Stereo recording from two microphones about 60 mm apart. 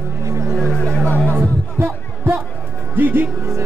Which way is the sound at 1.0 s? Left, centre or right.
Left.